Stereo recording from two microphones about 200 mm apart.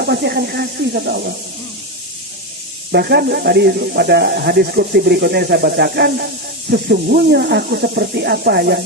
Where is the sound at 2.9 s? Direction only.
55° right (ahead or behind).